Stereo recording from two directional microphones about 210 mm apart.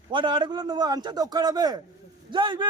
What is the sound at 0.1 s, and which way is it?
Speech, 25° right (ahead or behind).